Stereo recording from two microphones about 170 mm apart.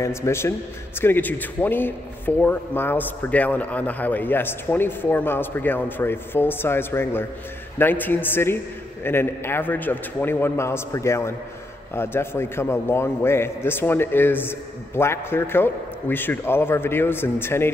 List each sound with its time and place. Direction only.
0.0 s a man's voice: 15° left (ahead or behind)